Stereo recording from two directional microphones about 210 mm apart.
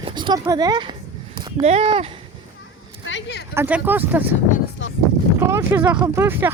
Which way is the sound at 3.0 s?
55° left (ahead or behind).